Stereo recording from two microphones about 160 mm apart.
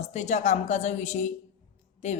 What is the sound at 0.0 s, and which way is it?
A woman's voice, 45° left (ahead or behind).